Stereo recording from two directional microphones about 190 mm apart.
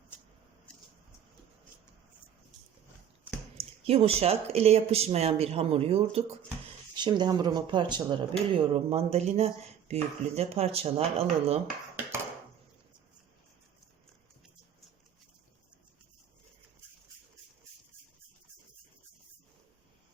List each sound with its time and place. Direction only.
3.6 s speech: 30° right (ahead or behind)